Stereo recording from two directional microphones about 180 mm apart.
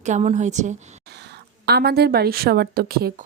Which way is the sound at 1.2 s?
65° right (ahead or behind).